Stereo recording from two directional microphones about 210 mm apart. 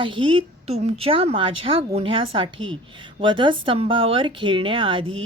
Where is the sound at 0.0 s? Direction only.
25° right (ahead or behind).